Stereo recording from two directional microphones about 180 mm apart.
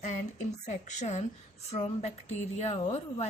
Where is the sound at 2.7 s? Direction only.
35° left (ahead or behind).